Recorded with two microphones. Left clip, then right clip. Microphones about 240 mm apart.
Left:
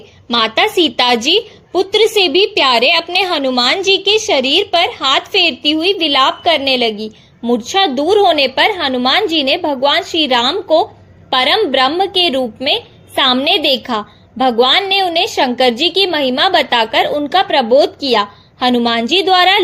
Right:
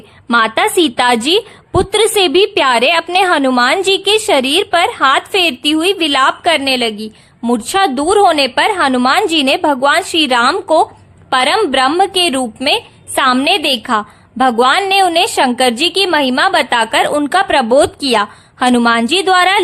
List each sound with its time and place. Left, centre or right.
0.3 s a woman's voice: right